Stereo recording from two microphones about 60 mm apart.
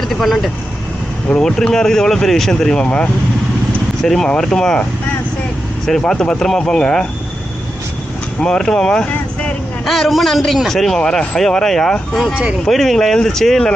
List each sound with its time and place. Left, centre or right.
0.1 s a man's voice: centre
1.3 s speech: centre
2.8 s speech: left
4.0 s speech: centre
5.8 s speech: centre
8.4 s speech: centre
9.8 s a man's voice: centre